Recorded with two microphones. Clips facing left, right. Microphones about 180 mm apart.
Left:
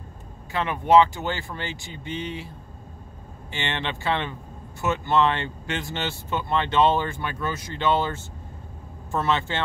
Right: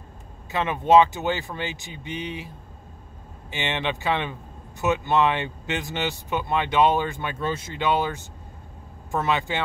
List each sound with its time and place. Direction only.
0.5 s speech: 20° right (ahead or behind)
7.7 s speech: 15° right (ahead or behind)